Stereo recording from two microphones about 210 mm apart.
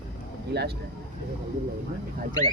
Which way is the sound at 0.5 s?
50° right (ahead or behind).